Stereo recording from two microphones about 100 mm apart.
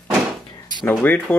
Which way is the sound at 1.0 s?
20° left (ahead or behind).